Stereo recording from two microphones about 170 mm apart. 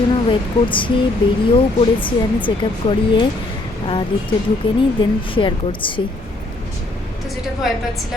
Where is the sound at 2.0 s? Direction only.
30° left (ahead or behind).